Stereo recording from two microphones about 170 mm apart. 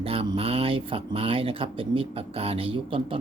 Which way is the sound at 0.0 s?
35° right (ahead or behind).